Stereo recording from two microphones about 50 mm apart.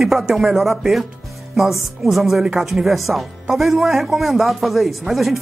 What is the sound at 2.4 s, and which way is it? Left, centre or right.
Speech, centre.